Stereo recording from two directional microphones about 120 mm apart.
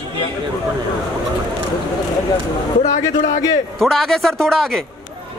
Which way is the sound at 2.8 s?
90° left.